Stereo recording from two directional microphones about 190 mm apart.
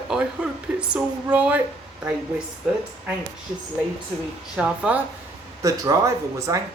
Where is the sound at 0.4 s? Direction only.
5° right (ahead or behind).